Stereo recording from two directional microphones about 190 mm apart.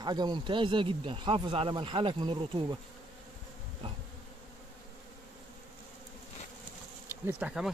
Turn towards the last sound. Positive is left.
turn(degrees=-5)  # may be behind; listen again after turning